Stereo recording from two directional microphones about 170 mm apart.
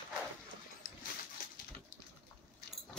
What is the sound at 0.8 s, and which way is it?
Dog, 50° left (ahead or behind).